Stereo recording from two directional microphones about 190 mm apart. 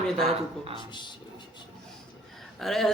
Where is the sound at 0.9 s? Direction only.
25° left (ahead or behind).